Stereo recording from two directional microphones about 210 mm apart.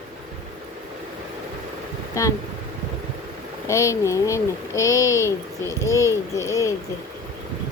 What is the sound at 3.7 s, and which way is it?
A child's voice, 15° left (ahead or behind).